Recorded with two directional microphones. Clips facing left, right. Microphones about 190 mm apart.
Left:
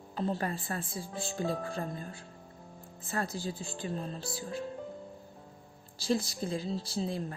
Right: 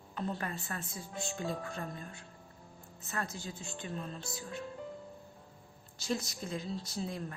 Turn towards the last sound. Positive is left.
turn(degrees=30)  # may be behind; listen again after turning